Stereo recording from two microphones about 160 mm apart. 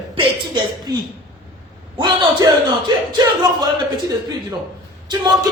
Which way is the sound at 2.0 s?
25° right (ahead or behind).